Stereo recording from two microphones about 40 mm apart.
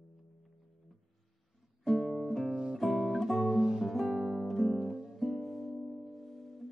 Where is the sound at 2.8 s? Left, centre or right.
Centre.